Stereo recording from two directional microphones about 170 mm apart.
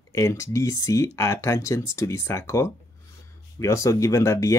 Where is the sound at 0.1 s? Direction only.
15° left (ahead or behind).